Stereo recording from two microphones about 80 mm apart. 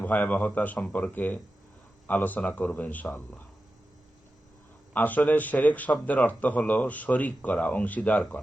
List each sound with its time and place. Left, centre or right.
0.0 s a man's voice: left
4.9 s a man's voice: left